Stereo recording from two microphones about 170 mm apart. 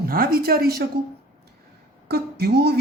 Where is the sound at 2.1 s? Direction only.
70° right (ahead or behind).